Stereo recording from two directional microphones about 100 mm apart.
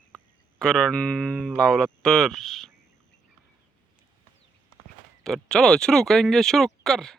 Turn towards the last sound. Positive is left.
turn(degrees=5)  # may be behind; listen again after turning